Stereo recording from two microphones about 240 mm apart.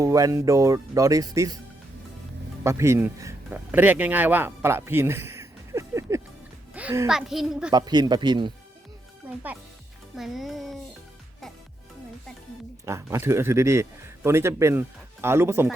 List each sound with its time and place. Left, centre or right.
0.0 s speech: centre
2.6 s a child's voice: centre
7.7 s speech: centre
10.2 s speech: centre
12.8 s speech: centre